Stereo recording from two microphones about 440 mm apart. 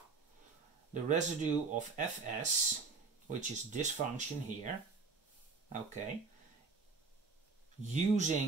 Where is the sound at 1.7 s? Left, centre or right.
Centre.